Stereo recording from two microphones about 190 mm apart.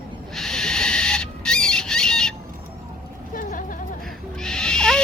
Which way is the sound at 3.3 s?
45° left (ahead or behind).